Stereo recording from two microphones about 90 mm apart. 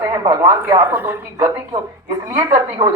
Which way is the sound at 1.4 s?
45° right (ahead or behind).